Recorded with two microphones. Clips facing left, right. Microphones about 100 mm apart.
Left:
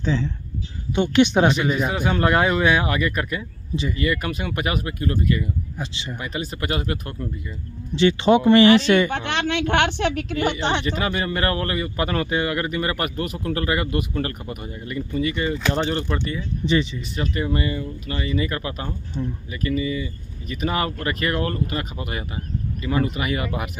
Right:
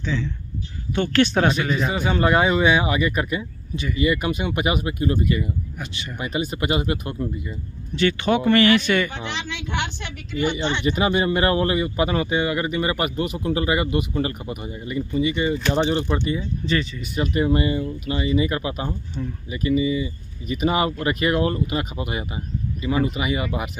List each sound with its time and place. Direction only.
0.0 s speech: 35° left (ahead or behind)
0.9 s speech: 20° left (ahead or behind)
1.6 s a man's voice: 5° left (ahead or behind); by 5.5 s 15° right (ahead or behind)
5.8 s speech: 25° left (ahead or behind)
6.1 s a man's voice: 10° right (ahead or behind)
7.9 s speech: 25° left (ahead or behind)
9.1 s a woman's voice: 65° left (ahead or behind); by 10.9 s 90° left
11.0 s a man's voice: 15° right (ahead or behind)
16.6 s speech: 20° left (ahead or behind)
17.1 s a man's voice: 15° right (ahead or behind)